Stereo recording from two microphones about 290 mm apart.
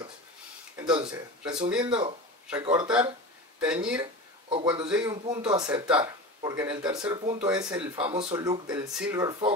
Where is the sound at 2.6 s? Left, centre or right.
Centre.